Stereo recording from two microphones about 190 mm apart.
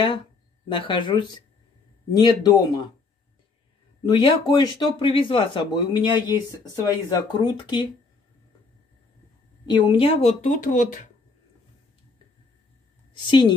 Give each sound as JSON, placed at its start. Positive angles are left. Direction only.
{"t": 0.7, "sound": "speech", "side_deg": 25}
{"t": 4.0, "sound": "speech", "side_deg": 25}
{"t": 9.7, "sound": "speech", "side_deg": 25}
{"t": 13.1, "sound": "a woman's voice", "side_deg": 25}